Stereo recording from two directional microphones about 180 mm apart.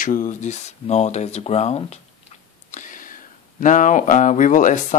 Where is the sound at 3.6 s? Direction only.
45° left (ahead or behind).